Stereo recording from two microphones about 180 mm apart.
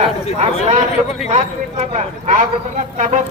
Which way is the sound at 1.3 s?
35° right (ahead or behind).